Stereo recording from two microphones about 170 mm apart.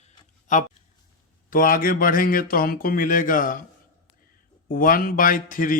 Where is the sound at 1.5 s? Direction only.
55° left (ahead or behind).